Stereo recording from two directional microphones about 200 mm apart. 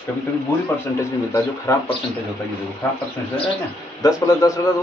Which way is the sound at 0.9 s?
15° left (ahead or behind).